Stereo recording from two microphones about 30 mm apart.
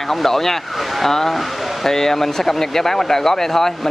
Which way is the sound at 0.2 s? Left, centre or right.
Centre.